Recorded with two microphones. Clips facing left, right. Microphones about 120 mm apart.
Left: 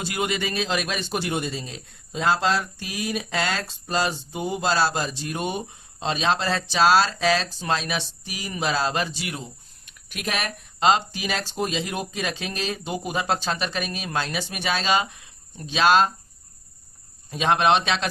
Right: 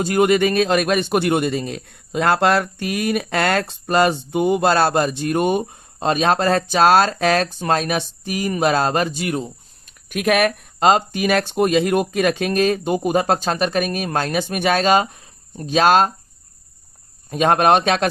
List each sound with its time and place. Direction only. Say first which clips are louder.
0.0 s a man's voice: right 11 dB; 50° right (ahead or behind)
17.2 s a man's voice: right 5 dB; 50° right (ahead or behind)